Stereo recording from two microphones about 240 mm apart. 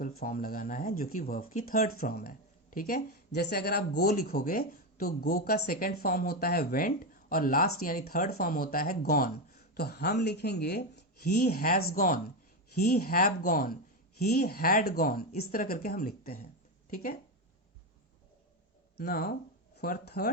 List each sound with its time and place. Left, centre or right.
0.2 s speech: left
18.9 s speech: left